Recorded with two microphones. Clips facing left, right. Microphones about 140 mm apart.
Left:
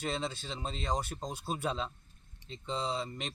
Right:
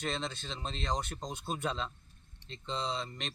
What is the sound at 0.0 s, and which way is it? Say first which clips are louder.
Speech: left 1 dB; 10° left (ahead or behind).